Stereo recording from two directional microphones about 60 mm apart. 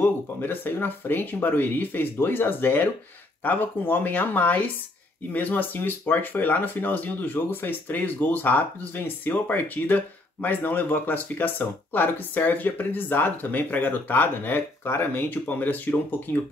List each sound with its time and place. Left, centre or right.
0.0 s speech: left